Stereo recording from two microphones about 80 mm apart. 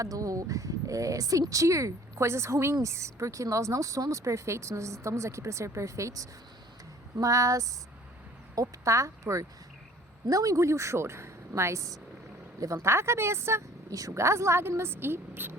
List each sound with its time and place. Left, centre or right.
0.0 s speech: right